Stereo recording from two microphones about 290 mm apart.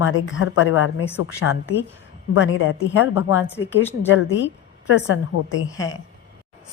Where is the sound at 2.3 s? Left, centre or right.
Left.